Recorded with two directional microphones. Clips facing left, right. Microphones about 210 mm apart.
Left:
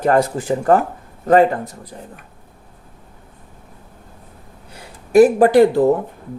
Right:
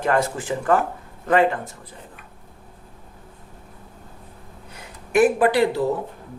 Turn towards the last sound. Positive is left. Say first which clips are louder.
# left 7 dB
turn(degrees=50)  # may be behind; listen again after turning